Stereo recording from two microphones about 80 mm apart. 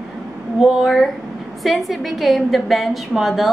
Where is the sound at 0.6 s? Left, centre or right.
Centre.